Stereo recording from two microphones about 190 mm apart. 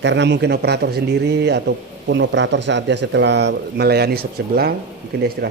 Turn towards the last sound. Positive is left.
turn(degrees=-60)  # may be behind; listen again after turning